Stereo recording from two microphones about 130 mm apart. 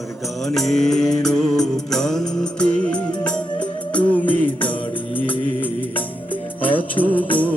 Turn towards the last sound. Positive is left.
turn(degrees=10)  # may be behind; listen again after turning